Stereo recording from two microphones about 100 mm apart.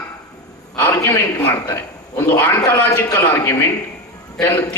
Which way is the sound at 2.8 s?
20° left (ahead or behind).